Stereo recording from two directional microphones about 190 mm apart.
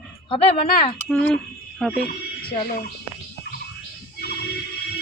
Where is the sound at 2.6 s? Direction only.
50° left (ahead or behind).